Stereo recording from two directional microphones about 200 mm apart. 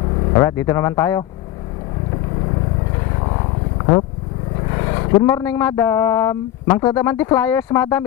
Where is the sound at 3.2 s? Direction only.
25° left (ahead or behind).